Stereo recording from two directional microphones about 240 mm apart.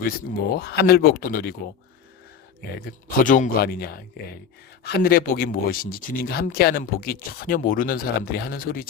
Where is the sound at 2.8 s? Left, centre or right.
Left.